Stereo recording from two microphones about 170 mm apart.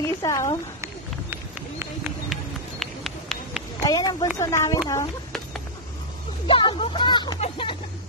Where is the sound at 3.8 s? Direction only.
20° left (ahead or behind).